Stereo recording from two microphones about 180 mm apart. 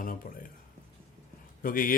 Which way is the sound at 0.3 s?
55° left (ahead or behind).